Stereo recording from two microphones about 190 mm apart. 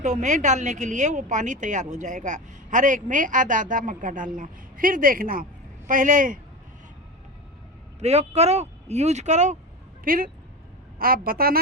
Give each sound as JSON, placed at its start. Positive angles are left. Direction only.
{"t": 0.0, "sound": "a woman's voice", "side_deg": -40}
{"t": 7.9, "sound": "a woman's voice", "side_deg": -35}